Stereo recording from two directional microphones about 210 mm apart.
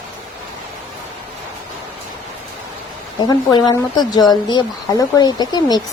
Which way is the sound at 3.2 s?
20° left (ahead or behind).